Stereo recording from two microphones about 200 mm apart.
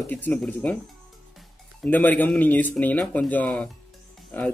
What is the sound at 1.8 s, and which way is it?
Speech, 10° left (ahead or behind).